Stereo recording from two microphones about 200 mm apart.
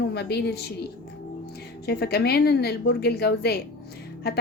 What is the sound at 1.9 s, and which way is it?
A woman's voice, 55° left (ahead or behind).